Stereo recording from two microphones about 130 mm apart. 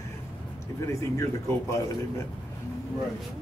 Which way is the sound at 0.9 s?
25° left (ahead or behind).